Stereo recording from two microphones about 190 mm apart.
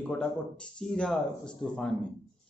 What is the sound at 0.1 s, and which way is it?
A man's voice, 5° left (ahead or behind).